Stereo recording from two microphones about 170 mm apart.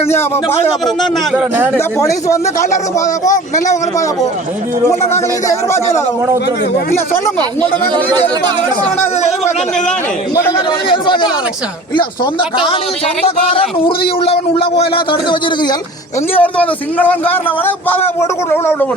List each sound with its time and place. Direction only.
0.1 s speech: 15° left (ahead or behind)
1.3 s speech: 10° right (ahead or behind)
2.0 s speech: 20° left (ahead or behind)
8.1 s speech: 25° right (ahead or behind)
10.8 s speech: 30° left (ahead or behind)
14.3 s speech: 35° left (ahead or behind)
16.3 s speech: 10° left (ahead or behind)